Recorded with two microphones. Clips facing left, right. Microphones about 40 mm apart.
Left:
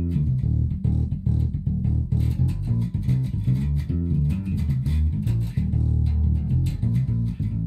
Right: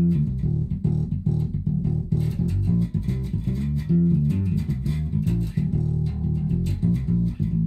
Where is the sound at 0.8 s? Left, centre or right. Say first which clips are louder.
Right 2 dB; centre.